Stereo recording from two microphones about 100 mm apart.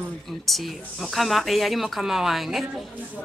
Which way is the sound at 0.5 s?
Centre (ahead or behind).